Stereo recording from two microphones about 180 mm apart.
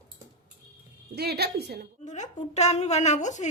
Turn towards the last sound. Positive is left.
turn(degrees=40)  # may be behind; listen again after turning